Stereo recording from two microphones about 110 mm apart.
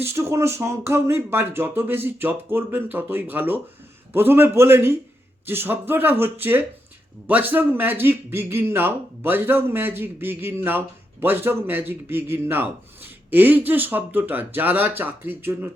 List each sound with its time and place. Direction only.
0.0 s speech: 25° right (ahead or behind)